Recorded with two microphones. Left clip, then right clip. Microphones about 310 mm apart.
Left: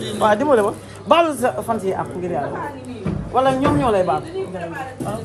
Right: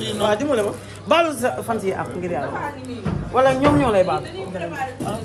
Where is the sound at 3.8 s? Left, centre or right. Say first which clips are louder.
Even; centre.